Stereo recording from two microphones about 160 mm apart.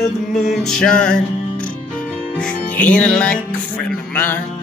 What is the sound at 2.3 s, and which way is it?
Music, 5° left (ahead or behind).